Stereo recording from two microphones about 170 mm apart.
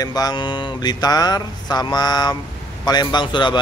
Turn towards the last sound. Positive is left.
turn(degrees=25)  # may be behind; listen again after turning